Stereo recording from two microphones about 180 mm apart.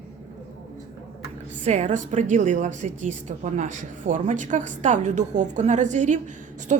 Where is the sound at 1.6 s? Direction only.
40° right (ahead or behind).